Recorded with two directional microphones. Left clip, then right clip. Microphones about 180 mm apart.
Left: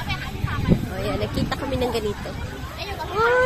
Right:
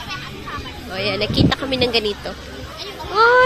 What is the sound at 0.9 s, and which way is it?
Speech, 15° right (ahead or behind).